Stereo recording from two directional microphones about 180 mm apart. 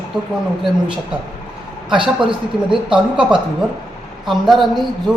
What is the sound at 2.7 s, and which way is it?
Speech, 5° right (ahead or behind).